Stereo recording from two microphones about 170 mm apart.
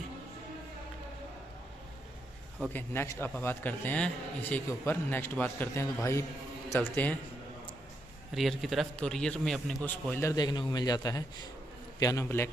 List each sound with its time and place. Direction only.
2.7 s a man's voice: 15° left (ahead or behind)
8.4 s a man's voice: centre (ahead or behind)
10.3 s a man's voice: 25° left (ahead or behind)